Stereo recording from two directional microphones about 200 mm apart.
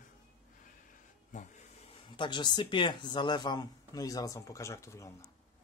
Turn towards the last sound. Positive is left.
turn(degrees=15)  # may be behind; listen again after turning